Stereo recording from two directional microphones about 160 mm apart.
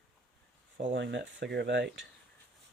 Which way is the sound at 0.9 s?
90° right.